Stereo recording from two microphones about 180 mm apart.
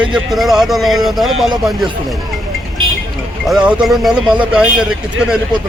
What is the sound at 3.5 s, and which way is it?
Speech, 5° right (ahead or behind).